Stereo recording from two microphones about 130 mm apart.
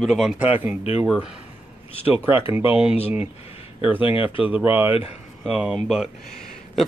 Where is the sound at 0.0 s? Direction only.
5° right (ahead or behind).